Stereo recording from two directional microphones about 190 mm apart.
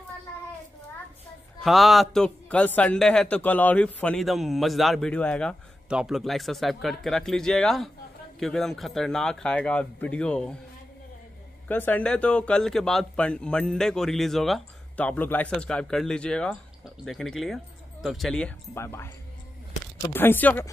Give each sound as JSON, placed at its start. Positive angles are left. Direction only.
{"t": 1.6, "sound": "a man's voice", "side_deg": 0}
{"t": 11.6, "sound": "a man's voice", "side_deg": 10}